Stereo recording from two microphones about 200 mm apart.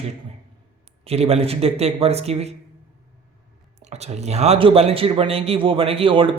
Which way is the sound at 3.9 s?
35° right (ahead or behind).